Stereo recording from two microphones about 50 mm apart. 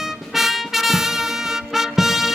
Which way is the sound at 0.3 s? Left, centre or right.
Centre.